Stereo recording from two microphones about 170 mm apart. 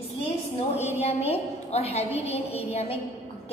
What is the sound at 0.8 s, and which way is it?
A woman's voice, 40° left (ahead or behind).